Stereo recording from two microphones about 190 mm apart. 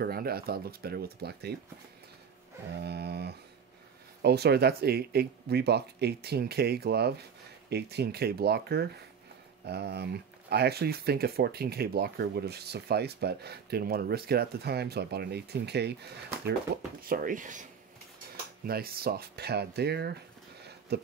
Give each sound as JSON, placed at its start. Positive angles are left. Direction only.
{"t": 0.0, "sound": "speech", "side_deg": -55}
{"t": 2.8, "sound": "speech", "side_deg": -60}
{"t": 18.7, "sound": "speech", "side_deg": -50}